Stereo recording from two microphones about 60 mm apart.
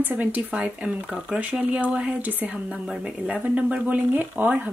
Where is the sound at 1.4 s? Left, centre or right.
Right.